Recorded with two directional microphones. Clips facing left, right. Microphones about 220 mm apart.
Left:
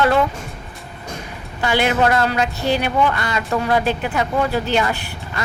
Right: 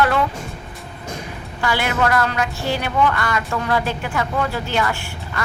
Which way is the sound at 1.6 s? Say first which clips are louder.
Left 3 dB; 25° left (ahead or behind).